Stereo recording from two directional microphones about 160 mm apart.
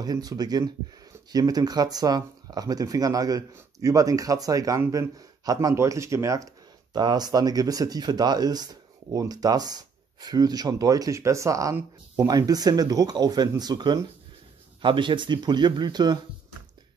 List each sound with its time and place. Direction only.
0.0 s speech: 25° right (ahead or behind)